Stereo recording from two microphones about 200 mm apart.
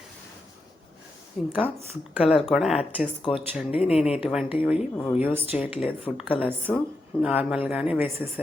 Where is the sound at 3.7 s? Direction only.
30° left (ahead or behind).